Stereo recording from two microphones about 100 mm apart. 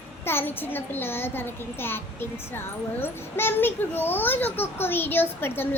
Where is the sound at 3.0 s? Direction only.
20° left (ahead or behind).